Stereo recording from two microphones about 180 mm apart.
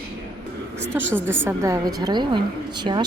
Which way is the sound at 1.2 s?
10° right (ahead or behind).